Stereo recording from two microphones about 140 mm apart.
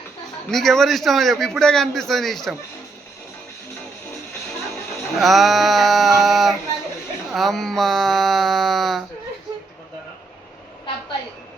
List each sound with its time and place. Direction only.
0.5 s a man's voice: 5° left (ahead or behind)
5.1 s speech: centre (ahead or behind)
7.3 s a sound: centre (ahead or behind)